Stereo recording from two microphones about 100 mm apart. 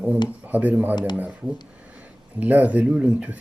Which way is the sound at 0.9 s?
45° left (ahead or behind).